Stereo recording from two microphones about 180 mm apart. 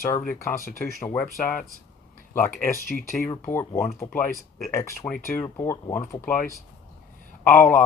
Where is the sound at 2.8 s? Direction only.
50° left (ahead or behind).